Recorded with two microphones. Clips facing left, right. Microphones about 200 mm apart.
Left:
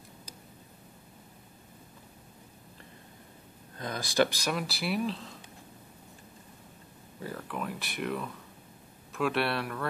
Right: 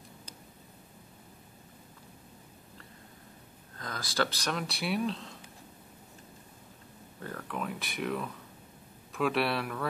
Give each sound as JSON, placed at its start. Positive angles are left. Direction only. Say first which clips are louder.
{"t": 3.7, "sound": "speech", "louder": "left 5 dB", "side_deg": 20}
{"t": 7.2, "sound": "speech", "louder": "left 1 dB", "side_deg": 5}